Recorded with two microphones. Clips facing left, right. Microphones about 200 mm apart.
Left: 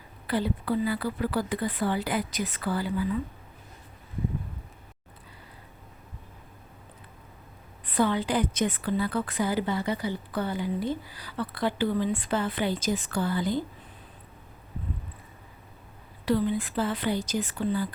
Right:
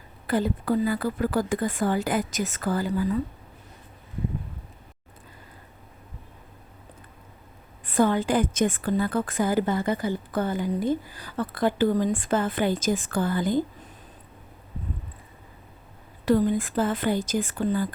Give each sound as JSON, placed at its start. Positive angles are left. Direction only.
{"t": 0.3, "sound": "a woman's voice", "side_deg": -45}
{"t": 7.9, "sound": "a woman's voice", "side_deg": -45}
{"t": 16.2, "sound": "a woman's voice", "side_deg": -45}